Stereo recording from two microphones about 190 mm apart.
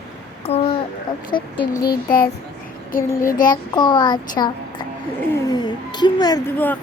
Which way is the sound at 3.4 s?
20° left (ahead or behind).